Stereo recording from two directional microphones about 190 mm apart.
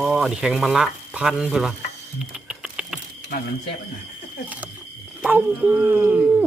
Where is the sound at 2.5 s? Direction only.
5° right (ahead or behind).